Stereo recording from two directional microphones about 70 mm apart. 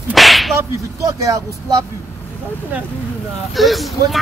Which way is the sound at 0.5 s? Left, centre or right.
Right.